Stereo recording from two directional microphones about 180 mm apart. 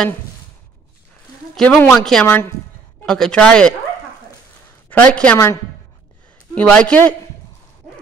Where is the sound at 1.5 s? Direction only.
5° left (ahead or behind).